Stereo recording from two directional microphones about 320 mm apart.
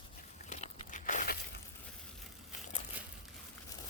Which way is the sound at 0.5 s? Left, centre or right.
Left.